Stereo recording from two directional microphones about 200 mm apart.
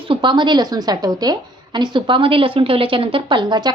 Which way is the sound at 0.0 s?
25° right (ahead or behind).